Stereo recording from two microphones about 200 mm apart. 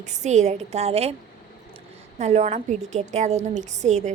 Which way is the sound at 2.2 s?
35° right (ahead or behind).